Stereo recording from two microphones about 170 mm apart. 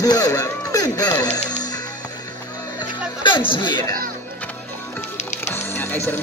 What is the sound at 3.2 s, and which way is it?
Speech, 30° left (ahead or behind).